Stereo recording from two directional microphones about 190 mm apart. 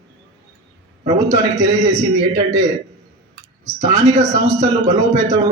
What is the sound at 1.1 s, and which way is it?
A man's voice, 15° right (ahead or behind).